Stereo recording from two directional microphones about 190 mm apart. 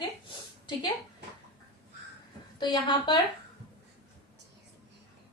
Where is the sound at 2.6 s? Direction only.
25° left (ahead or behind).